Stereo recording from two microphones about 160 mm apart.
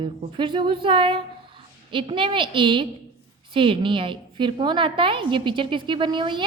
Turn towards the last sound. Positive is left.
turn(degrees=-30)  # may be behind; listen again after turning